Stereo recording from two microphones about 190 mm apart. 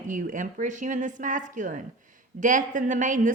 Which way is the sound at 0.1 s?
45° right (ahead or behind).